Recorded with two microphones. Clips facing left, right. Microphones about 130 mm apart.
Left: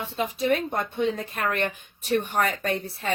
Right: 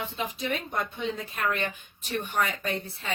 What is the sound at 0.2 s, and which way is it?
Speech, 45° left (ahead or behind).